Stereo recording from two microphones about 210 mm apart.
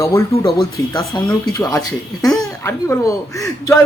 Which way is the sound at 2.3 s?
5° left (ahead or behind).